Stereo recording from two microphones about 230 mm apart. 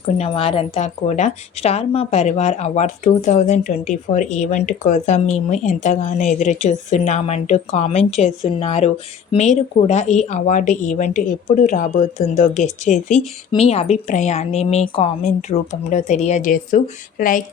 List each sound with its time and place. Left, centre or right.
0.2 s a woman's voice: left